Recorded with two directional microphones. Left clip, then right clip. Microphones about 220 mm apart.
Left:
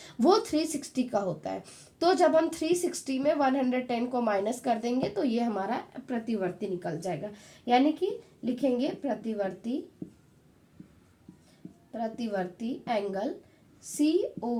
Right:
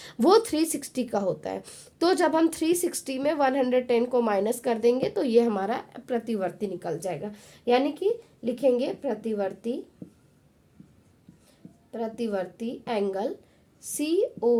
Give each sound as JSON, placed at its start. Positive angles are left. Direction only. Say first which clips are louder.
{"t": 0.0, "sound": "a woman's voice", "louder": "right 4 dB", "side_deg": -40}
{"t": 11.9, "sound": "a woman's voice", "louder": "right 3 dB", "side_deg": -45}